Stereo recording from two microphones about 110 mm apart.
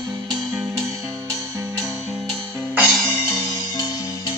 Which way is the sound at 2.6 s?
15° right (ahead or behind).